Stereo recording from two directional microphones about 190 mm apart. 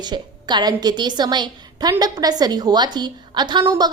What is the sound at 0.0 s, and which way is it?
A woman's voice, 25° right (ahead or behind).